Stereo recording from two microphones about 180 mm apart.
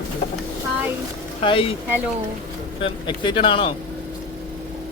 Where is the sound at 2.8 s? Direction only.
25° left (ahead or behind).